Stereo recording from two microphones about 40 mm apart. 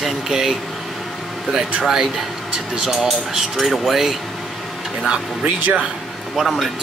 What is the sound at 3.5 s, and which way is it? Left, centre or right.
Speech, centre.